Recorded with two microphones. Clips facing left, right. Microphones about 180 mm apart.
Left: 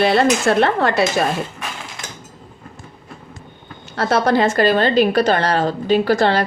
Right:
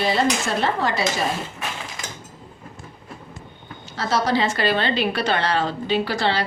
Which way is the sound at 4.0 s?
60° left (ahead or behind).